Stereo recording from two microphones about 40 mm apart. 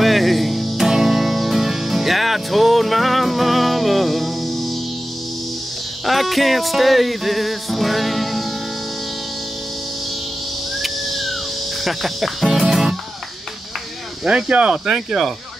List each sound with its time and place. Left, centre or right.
0.0 s music: centre
0.8 s music: centre
6.0 s music: centre
10.8 s a sound: centre
11.8 s cricket: centre
14.2 s speech: right
14.7 s speech: centre